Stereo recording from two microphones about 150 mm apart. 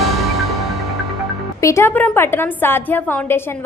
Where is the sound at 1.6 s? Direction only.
20° left (ahead or behind).